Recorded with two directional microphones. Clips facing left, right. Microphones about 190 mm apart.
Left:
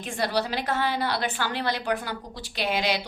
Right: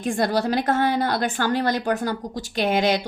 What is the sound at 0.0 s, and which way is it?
A woman's voice, 45° right (ahead or behind).